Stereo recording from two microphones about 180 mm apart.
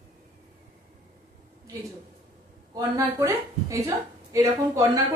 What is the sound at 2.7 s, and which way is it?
A woman's voice, 20° right (ahead or behind).